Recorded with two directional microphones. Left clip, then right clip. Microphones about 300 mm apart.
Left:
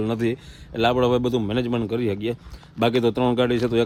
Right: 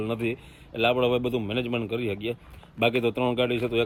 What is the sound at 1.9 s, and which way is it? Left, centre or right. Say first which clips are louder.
Speech: left 4 dB; left.